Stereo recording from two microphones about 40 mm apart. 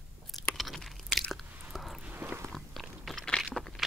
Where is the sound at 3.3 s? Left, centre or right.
Left.